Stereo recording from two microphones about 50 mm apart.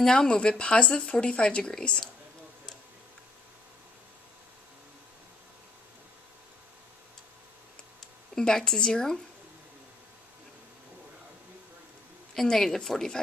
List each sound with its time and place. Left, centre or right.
0.0 s a woman's voice: centre
8.4 s a woman's voice: centre
12.4 s a woman's voice: centre